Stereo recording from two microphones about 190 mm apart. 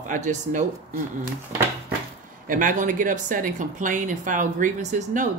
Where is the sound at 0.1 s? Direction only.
40° right (ahead or behind).